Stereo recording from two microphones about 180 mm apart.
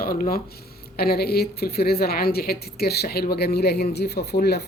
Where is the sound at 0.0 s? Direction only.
55° left (ahead or behind).